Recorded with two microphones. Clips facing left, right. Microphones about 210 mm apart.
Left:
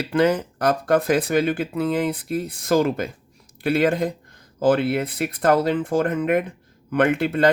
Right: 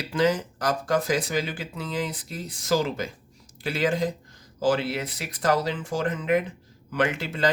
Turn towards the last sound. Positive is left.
turn(degrees=55)  # may be behind; listen again after turning